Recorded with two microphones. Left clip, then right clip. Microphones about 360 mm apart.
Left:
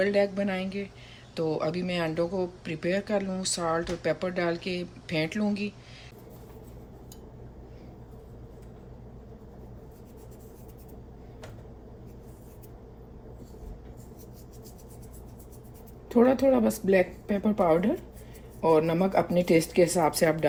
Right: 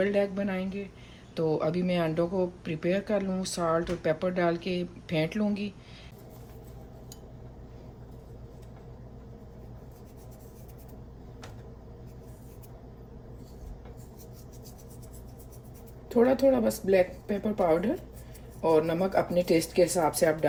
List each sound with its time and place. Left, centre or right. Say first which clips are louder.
0.0 s speech: left 2 dB; centre
16.0 s speech: left 1 dB; left